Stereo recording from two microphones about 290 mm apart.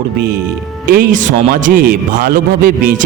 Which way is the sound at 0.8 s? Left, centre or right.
Right.